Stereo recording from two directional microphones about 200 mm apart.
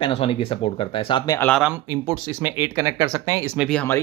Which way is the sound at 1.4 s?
5° left (ahead or behind).